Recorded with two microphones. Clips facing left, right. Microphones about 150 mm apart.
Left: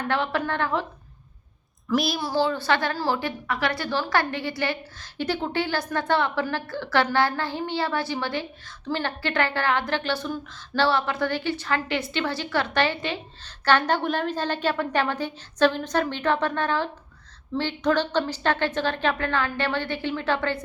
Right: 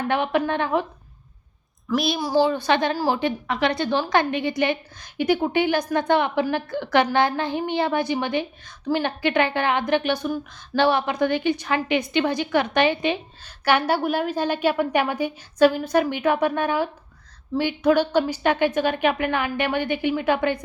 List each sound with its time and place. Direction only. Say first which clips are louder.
0.1 s a woman's voice: right 4 dB; 15° right (ahead or behind)
1.9 s a woman's voice: right 1 dB; centre (ahead or behind)
2.1 s a woman's voice: right 4 dB; 15° right (ahead or behind)